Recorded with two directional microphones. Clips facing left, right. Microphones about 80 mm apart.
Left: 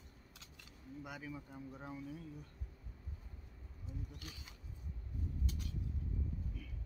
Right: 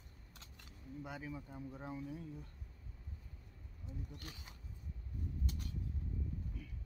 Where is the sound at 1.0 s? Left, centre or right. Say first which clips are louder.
Right 1 dB; right.